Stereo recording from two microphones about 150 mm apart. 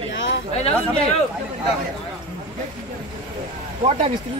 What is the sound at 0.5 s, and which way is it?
Speech, 45° left (ahead or behind).